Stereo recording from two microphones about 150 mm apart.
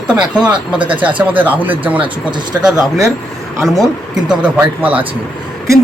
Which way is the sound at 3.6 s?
20° right (ahead or behind).